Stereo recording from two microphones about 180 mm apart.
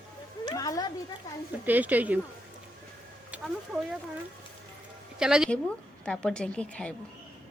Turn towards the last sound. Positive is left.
turn(degrees=5)  # may be behind; listen again after turning